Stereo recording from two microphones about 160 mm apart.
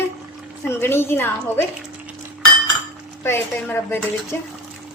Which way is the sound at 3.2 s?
15° left (ahead or behind).